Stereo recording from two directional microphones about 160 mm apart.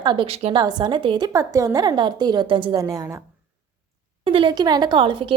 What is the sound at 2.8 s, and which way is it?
Speech, 20° right (ahead or behind).